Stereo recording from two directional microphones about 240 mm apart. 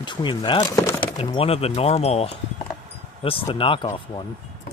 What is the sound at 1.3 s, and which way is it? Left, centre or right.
Speech, left.